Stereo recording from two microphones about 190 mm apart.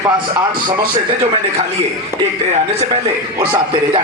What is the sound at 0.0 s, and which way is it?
Speech, 25° right (ahead or behind).